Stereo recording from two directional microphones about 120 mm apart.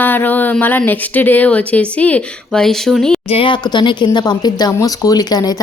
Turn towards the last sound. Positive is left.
turn(degrees=35)  # may be behind; listen again after turning